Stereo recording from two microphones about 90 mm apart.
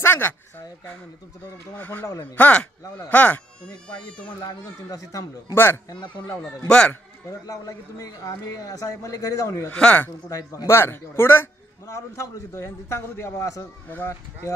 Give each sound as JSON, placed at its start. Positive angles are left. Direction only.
{"t": 0.0, "sound": "a sound", "side_deg": 25}
{"t": 1.8, "sound": "speech", "side_deg": 20}
{"t": 4.4, "sound": "a man's voice", "side_deg": 40}
{"t": 5.5, "sound": "speech", "side_deg": 25}
{"t": 6.7, "sound": "speech", "side_deg": 15}
{"t": 7.2, "sound": "a man's voice", "side_deg": 40}
{"t": 9.8, "sound": "speech", "side_deg": 15}
{"t": 10.7, "sound": "a man's voice", "side_deg": 25}
{"t": 13.8, "sound": "speech", "side_deg": 20}